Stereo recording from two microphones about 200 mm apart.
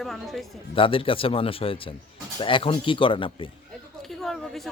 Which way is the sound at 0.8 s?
25° left (ahead or behind).